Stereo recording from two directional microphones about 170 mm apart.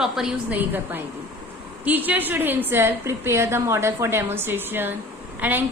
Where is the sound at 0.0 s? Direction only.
5° right (ahead or behind).